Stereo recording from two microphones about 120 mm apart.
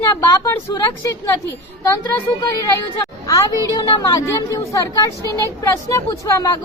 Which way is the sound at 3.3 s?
30° left (ahead or behind).